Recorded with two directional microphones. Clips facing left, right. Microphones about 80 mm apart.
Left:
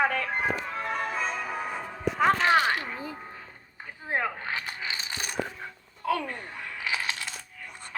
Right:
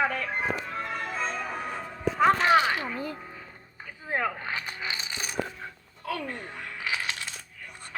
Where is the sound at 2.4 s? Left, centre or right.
Centre.